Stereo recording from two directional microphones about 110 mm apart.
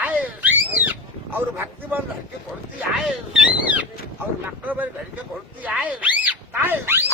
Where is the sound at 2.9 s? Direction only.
5° right (ahead or behind).